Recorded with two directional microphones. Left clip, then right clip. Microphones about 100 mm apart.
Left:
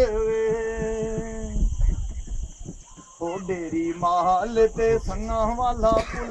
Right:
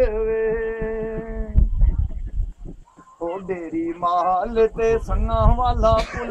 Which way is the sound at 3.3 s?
25° left (ahead or behind).